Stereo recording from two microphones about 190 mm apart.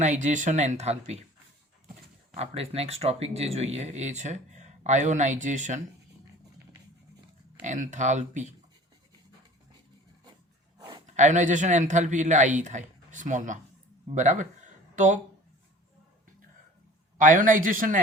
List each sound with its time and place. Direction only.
0.0 s speech: 40° right (ahead or behind)
2.3 s speech: 35° right (ahead or behind)
7.6 s speech: 40° right (ahead or behind)
10.8 s a sound: 25° right (ahead or behind)
11.0 s speech: 40° right (ahead or behind)
17.2 s a man's voice: 45° right (ahead or behind)